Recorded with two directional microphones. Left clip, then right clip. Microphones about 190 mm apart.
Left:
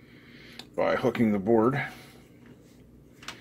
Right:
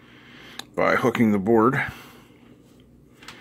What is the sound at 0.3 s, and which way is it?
Speech, 30° right (ahead or behind).